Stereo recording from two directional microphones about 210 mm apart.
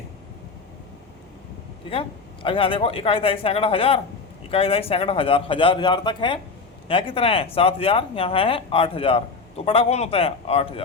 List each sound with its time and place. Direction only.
1.9 s speech: 25° left (ahead or behind)